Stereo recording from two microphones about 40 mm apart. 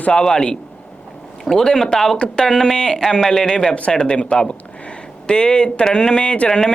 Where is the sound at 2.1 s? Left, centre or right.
Left.